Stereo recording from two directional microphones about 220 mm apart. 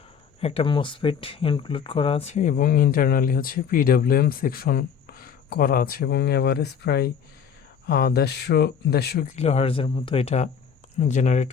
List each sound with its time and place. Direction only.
0.3 s speech: 25° left (ahead or behind); by 9.3 s 45° left (ahead or behind)
9.3 s speech: 30° left (ahead or behind)